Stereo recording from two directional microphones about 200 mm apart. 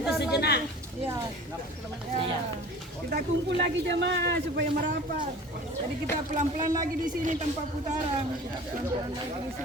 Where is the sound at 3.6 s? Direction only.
60° right (ahead or behind).